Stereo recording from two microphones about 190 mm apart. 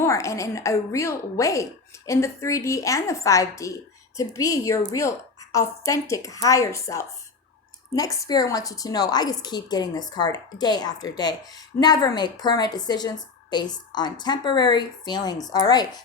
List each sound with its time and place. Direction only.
0.0 s a woman's voice: 15° left (ahead or behind)